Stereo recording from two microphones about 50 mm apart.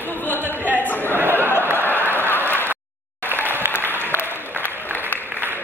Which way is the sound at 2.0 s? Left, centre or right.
Right.